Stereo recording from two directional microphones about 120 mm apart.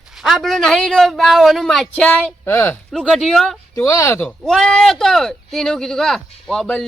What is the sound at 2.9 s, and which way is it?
Speech, 5° left (ahead or behind).